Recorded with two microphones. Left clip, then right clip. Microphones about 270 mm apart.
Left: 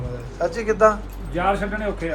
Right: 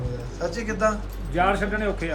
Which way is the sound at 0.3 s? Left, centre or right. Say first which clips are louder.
Left 8 dB; centre.